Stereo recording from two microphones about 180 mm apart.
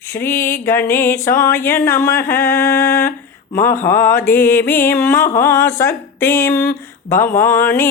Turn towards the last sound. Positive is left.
turn(degrees=10)  # may be behind; listen again after turning